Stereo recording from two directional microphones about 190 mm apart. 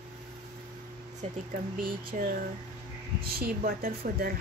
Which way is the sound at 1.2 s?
35° right (ahead or behind).